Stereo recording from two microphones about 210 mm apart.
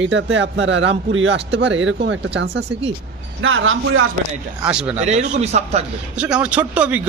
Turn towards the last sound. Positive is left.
turn(degrees=-5)  # may be behind; listen again after turning